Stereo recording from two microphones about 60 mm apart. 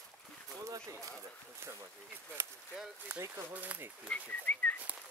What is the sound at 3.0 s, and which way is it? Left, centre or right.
Speech, right.